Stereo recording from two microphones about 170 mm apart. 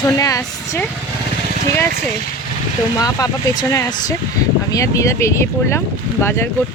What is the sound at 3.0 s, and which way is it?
Speech, 20° left (ahead or behind).